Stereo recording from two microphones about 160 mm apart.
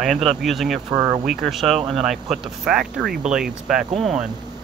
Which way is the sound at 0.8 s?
25° right (ahead or behind).